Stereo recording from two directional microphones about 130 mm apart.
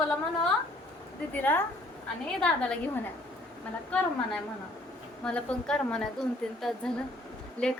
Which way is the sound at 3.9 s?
10° left (ahead or behind).